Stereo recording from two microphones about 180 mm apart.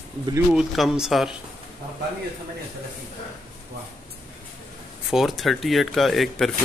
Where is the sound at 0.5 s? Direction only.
Centre (ahead or behind).